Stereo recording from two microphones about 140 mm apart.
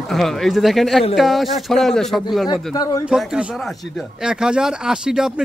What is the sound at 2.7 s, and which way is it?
Speech, 25° left (ahead or behind).